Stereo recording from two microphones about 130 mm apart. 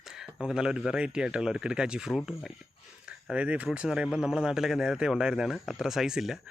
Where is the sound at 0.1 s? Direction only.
5° right (ahead or behind).